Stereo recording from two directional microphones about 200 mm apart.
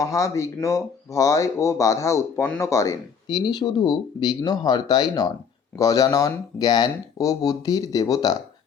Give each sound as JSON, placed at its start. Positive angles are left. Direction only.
{"t": 0.0, "sound": "speech", "side_deg": 15}